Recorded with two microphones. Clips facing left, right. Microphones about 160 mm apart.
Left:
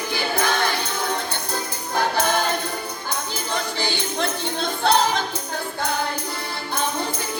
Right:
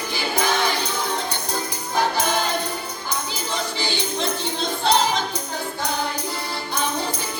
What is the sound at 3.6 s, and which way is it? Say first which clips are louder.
Music: even; 55° left (ahead or behind).